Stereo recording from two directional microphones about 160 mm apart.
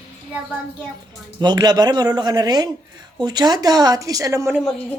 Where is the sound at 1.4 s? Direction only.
25° right (ahead or behind).